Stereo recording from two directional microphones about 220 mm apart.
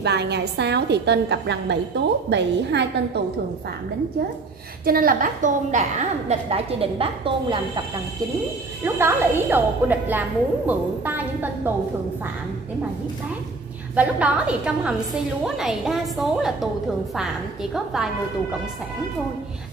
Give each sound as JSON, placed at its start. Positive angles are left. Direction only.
{"t": 0.0, "sound": "a woman's voice", "side_deg": -50}
{"t": 4.8, "sound": "a woman's voice", "side_deg": -40}
{"t": 8.8, "sound": "a woman's voice", "side_deg": -10}
{"t": 13.9, "sound": "a woman's voice", "side_deg": -5}